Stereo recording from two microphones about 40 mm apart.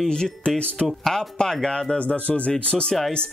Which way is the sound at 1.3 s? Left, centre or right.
Centre.